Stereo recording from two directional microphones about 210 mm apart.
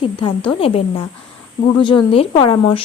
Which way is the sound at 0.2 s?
25° left (ahead or behind).